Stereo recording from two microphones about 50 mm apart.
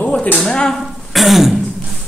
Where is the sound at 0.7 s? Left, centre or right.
Centre.